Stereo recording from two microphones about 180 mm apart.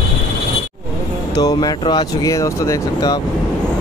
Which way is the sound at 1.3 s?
20° left (ahead or behind).